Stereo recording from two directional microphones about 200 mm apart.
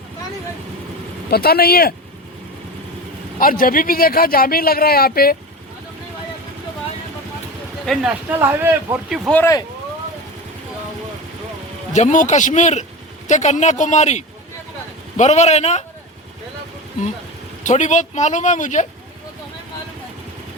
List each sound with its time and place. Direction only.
1.3 s a man's voice: 50° left (ahead or behind)
3.3 s a man's voice: 45° left (ahead or behind)
7.9 s speech: 10° right (ahead or behind)
9.3 s speech: 15° left (ahead or behind)
11.9 s speech: 35° left (ahead or behind)
17.6 s speech: 40° left (ahead or behind)